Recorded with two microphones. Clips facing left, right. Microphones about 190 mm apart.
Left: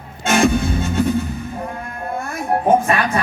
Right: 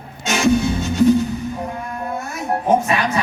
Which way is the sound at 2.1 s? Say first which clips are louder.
Left 4 dB; 55° left (ahead or behind).